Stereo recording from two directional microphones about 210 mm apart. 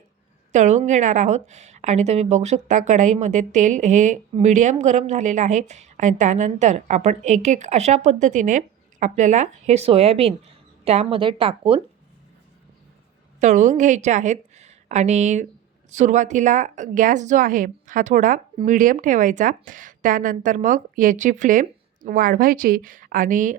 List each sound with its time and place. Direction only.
0.5 s a woman's voice: 35° right (ahead or behind)
13.4 s a woman's voice: 35° right (ahead or behind)